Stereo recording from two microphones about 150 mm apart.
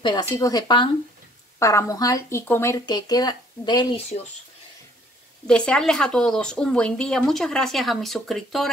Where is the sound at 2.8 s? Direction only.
25° left (ahead or behind).